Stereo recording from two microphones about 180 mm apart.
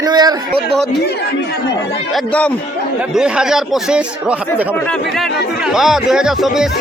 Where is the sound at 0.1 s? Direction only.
25° right (ahead or behind).